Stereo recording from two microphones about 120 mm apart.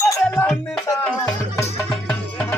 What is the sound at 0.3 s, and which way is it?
Music, 10° left (ahead or behind).